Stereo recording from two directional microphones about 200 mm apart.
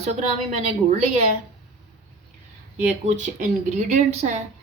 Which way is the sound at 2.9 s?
35° right (ahead or behind).